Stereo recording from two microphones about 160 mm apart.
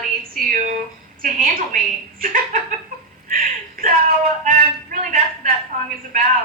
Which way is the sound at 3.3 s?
60° right (ahead or behind).